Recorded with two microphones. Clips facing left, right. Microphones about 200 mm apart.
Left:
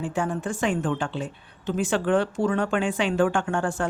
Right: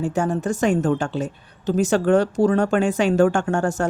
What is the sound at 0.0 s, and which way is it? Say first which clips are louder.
Speech: right 5 dB; 40° right (ahead or behind).